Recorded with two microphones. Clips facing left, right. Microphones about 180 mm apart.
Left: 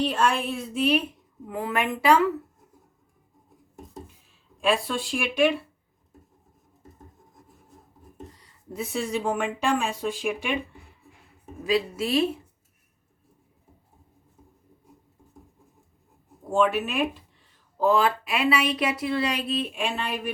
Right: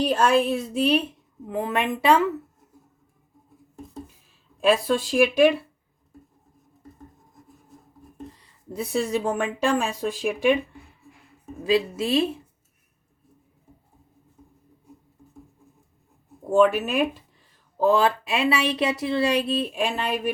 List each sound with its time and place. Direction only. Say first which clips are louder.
0.0 s speech: right 4 dB; 40° right (ahead or behind); by 2.2 s 25° right (ahead or behind)
4.6 s speech: right 5 dB; 40° right (ahead or behind)
8.7 s speech: right 4 dB; 35° right (ahead or behind)
11.6 s speech: right 3 dB; 25° right (ahead or behind)
16.5 s speech: right 4 dB; 40° right (ahead or behind)
17.7 s speech: right 2 dB; 30° right (ahead or behind)